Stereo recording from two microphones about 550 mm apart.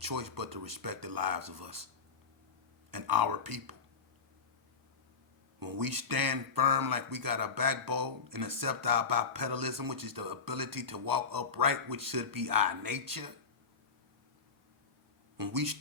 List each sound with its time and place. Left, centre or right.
0.0 s speech: right
2.9 s speech: right
5.5 s speech: right
15.4 s speech: right